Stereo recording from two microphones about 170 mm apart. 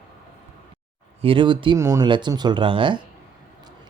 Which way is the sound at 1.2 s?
30° right (ahead or behind).